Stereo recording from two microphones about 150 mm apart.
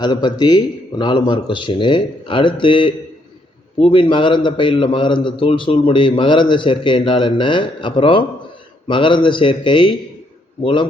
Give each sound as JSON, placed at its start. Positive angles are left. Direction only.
{"t": 0.0, "sound": "a man's voice", "side_deg": 30}